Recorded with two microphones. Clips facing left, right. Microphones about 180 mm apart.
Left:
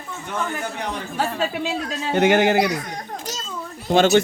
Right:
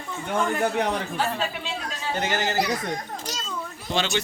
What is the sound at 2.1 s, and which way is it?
Speech, 60° left (ahead or behind).